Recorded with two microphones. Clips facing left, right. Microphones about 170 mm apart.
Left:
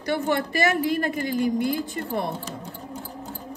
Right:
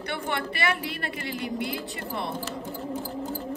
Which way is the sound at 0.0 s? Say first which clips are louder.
Left 6 dB; 40° left (ahead or behind).